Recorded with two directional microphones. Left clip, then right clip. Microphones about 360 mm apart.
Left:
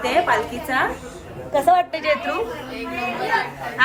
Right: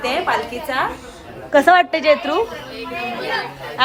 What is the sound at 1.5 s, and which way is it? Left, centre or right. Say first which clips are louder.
Speech: right 5 dB; right.